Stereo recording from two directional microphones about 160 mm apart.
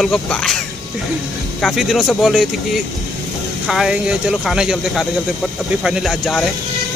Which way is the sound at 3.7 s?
5° right (ahead or behind).